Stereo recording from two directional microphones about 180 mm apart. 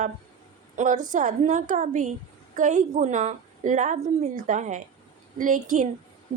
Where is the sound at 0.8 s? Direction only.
45° right (ahead or behind).